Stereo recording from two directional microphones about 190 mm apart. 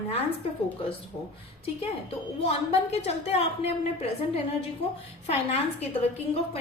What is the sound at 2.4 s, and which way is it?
A woman's voice, 35° left (ahead or behind).